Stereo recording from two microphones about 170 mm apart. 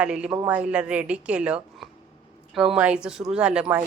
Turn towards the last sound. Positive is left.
turn(degrees=-5)  # may be behind; listen again after turning